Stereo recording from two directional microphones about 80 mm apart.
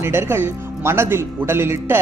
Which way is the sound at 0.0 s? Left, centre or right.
Right.